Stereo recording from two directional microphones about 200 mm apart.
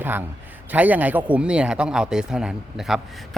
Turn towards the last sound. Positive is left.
turn(degrees=0)  # may be behind; listen again after turning